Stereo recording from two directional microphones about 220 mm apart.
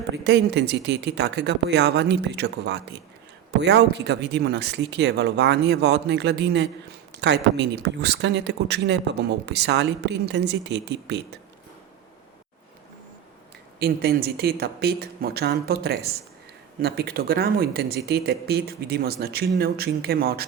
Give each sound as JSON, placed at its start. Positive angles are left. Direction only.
{"t": 0.3, "sound": "speech", "side_deg": -50}
{"t": 13.7, "sound": "speech", "side_deg": -45}